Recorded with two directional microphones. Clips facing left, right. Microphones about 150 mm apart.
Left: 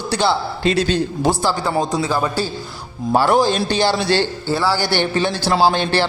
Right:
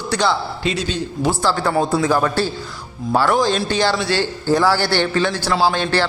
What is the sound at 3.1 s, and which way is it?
A man's voice, 25° left (ahead or behind).